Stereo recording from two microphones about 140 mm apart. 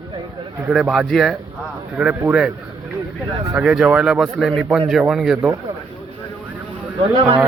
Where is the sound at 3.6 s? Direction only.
5° right (ahead or behind).